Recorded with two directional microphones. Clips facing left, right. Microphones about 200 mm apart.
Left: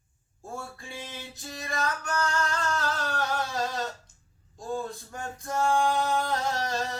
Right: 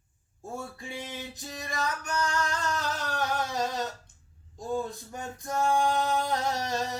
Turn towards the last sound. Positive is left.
turn(degrees=-20)  # may be behind; listen again after turning